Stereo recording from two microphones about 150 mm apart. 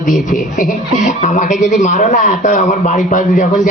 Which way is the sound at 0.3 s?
60° left (ahead or behind).